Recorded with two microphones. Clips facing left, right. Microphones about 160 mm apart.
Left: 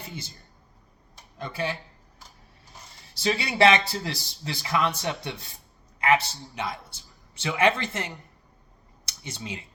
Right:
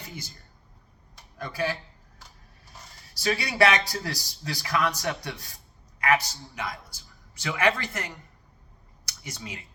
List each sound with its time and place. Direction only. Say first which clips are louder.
0.0 s a woman's voice: left 2 dB; 25° left (ahead or behind)
1.4 s a man's voice: right 1 dB; 20° left (ahead or behind)
3.2 s a man's voice: left 1 dB; 25° left (ahead or behind)